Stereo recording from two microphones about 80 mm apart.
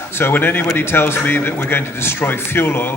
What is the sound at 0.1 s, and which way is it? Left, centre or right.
A man's voice, left.